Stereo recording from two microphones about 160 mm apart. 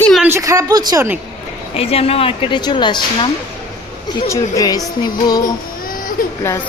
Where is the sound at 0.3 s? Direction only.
20° right (ahead or behind).